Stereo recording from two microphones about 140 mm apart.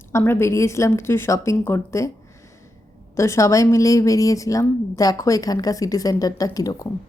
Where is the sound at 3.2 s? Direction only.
20° left (ahead or behind).